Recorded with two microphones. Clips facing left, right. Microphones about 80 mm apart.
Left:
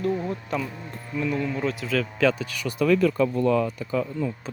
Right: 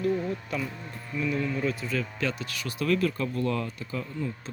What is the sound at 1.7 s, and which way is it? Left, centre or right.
Speech, left.